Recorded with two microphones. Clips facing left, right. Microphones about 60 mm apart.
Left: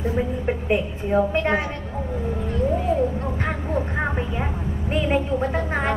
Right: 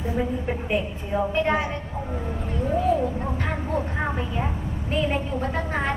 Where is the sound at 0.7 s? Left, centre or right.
Left.